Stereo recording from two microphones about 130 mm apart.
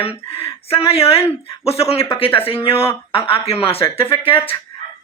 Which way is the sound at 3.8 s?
35° left (ahead or behind).